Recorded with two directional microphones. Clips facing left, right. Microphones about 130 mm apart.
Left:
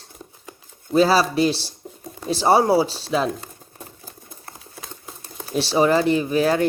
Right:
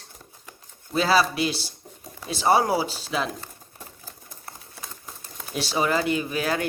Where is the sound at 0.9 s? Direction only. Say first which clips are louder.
Left 5 dB; 40° left (ahead or behind).